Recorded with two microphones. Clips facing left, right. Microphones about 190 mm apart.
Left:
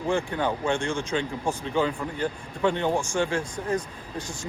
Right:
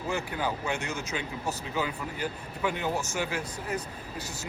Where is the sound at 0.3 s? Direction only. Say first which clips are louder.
Left 5 dB; 30° left (ahead or behind).